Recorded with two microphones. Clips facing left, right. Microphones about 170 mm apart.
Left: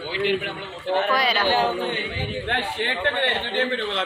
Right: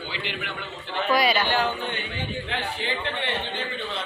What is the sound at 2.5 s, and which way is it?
A man's voice, 65° left (ahead or behind).